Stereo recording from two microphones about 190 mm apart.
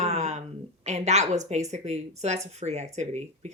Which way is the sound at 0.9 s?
35° right (ahead or behind).